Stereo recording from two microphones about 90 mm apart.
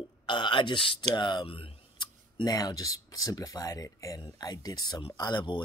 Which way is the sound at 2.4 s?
45° left (ahead or behind).